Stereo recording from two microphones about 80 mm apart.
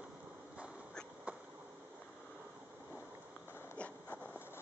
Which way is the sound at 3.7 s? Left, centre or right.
Centre.